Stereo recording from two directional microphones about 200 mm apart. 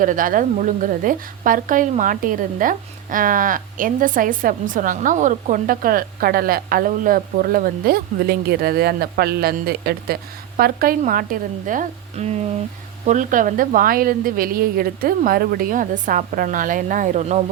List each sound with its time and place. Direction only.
0.0 s a woman's voice: 40° right (ahead or behind)